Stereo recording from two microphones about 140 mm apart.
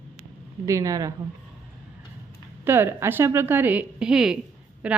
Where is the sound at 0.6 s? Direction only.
25° right (ahead or behind).